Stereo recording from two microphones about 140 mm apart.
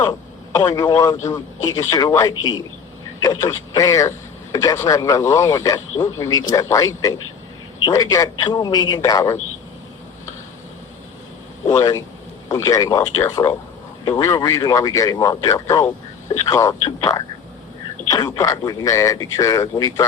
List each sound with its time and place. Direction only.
0.5 s speech: 25° left (ahead or behind)
11.7 s speech: 20° left (ahead or behind)